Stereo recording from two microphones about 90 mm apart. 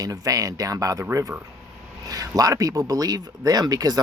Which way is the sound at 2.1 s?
45° right (ahead or behind).